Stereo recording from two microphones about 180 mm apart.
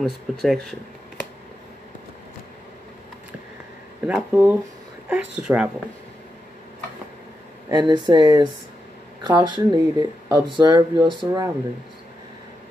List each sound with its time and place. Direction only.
0.0 s speech: centre (ahead or behind)
4.1 s speech: 10° right (ahead or behind)
7.7 s speech: 25° right (ahead or behind)